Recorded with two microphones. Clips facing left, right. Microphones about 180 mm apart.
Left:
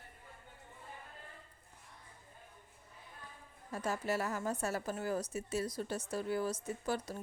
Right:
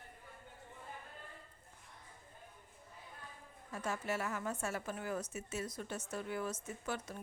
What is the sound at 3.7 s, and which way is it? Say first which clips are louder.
A woman's voice: left 3 dB; 35° left (ahead or behind).